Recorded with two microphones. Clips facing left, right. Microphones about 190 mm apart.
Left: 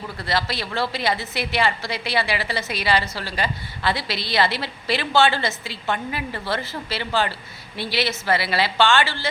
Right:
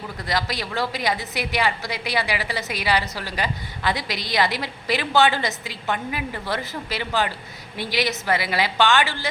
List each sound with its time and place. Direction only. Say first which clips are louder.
0.3 s a woman's voice: left 1 dB; 15° right (ahead or behind)